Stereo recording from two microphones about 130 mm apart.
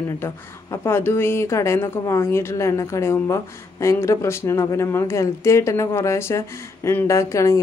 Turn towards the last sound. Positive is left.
turn(degrees=25)  # may be behind; listen again after turning